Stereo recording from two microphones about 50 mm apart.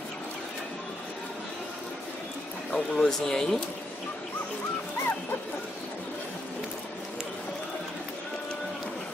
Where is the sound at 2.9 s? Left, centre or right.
Centre.